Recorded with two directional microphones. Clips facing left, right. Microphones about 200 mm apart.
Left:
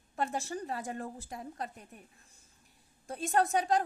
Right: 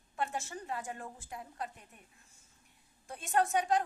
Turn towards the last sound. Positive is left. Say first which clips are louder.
# left 2 dB
turn(degrees=35)  # may be behind; listen again after turning